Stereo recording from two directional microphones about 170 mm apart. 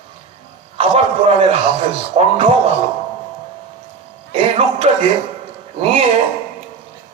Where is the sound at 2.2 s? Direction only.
40° right (ahead or behind).